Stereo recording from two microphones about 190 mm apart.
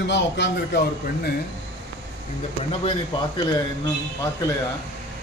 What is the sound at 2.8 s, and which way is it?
Speech, 25° left (ahead or behind).